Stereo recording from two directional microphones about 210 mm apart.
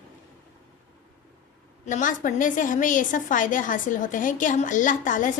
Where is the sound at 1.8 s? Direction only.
35° left (ahead or behind).